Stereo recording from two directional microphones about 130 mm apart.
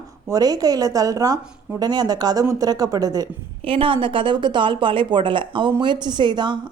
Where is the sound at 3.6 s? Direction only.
45° right (ahead or behind).